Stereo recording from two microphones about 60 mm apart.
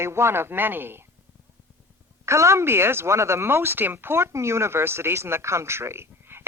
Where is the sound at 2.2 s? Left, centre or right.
Right.